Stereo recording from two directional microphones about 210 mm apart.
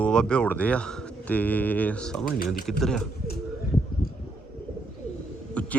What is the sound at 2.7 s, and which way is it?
Speech, centre (ahead or behind).